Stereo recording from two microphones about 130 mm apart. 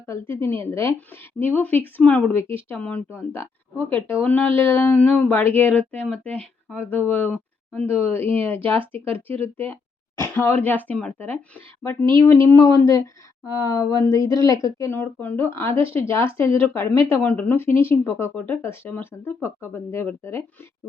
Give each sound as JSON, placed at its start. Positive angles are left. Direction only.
{"t": 0.1, "sound": "speech", "side_deg": 20}
{"t": 11.8, "sound": "speech", "side_deg": 20}